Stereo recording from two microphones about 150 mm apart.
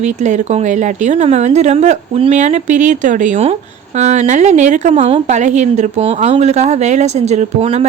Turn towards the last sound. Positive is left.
turn(degrees=-45)  # may be behind; listen again after turning